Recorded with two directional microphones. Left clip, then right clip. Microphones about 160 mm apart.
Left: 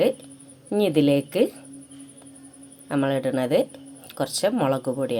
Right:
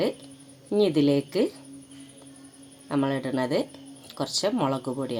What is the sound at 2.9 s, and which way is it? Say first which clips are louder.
Speech: left 4 dB; 10° left (ahead or behind).